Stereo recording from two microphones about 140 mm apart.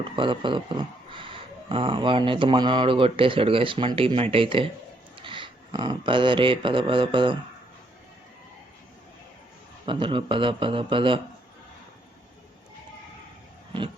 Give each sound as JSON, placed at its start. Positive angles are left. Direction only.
{"t": 0.0, "sound": "speech", "side_deg": -35}
{"t": 9.8, "sound": "speech", "side_deg": -35}